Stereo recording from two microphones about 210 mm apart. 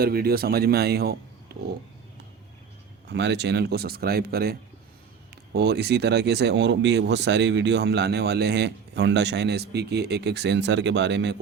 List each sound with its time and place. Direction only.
0.0 s speech: 45° right (ahead or behind)
1.5 s a sound: 50° right (ahead or behind)
3.1 s speech: 55° right (ahead or behind)
5.5 s speech: 50° right (ahead or behind)